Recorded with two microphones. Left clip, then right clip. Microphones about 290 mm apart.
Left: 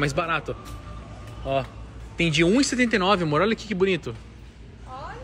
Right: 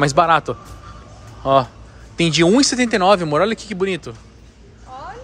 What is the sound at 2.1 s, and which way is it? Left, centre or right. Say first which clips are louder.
A man's voice: right 6 dB; centre.